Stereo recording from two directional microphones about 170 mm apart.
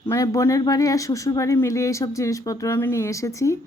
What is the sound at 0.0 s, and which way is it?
Speech, 15° left (ahead or behind).